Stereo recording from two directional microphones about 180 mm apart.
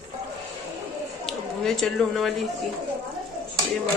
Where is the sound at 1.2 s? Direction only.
5° left (ahead or behind).